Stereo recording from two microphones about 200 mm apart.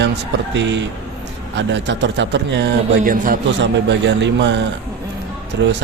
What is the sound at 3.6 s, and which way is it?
Speech, 60° right (ahead or behind).